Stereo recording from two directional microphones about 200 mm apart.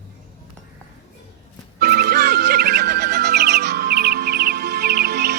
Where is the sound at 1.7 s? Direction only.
50° right (ahead or behind).